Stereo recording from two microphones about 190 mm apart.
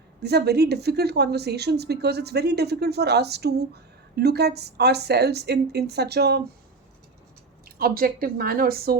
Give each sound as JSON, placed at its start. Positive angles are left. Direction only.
{"t": 0.2, "sound": "speech", "side_deg": -60}
{"t": 7.8, "sound": "a woman's voice", "side_deg": -50}